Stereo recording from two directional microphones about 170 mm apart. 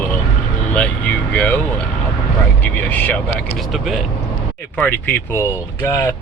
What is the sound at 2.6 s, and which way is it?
Speech, 10° left (ahead or behind).